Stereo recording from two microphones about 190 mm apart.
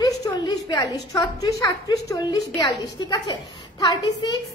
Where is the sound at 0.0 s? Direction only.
20° left (ahead or behind).